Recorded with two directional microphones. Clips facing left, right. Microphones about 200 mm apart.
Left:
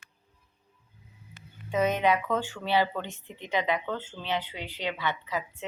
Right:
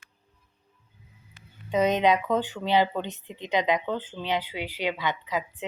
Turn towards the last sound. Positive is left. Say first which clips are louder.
# right 3 dB
turn(degrees=-15)  # may be behind; listen again after turning